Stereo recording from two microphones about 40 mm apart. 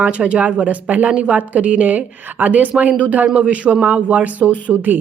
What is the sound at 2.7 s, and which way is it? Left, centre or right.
A woman's voice, right.